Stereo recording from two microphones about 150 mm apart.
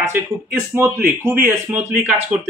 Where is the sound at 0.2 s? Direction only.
15° right (ahead or behind).